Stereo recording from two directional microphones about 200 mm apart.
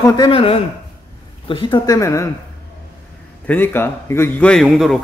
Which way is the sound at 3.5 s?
10° left (ahead or behind).